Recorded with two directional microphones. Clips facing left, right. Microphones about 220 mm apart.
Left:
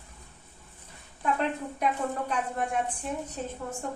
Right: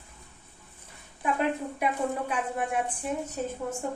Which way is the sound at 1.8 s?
5° right (ahead or behind).